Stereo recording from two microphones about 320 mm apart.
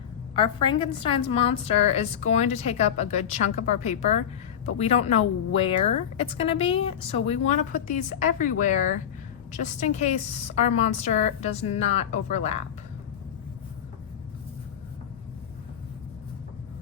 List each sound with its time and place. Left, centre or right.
0.3 s a woman's voice: centre